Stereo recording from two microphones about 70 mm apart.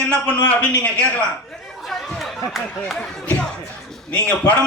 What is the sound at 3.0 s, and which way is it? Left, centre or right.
Speech, centre.